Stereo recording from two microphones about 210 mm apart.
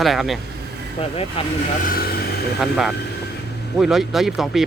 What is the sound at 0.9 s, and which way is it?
Speech, 25° left (ahead or behind).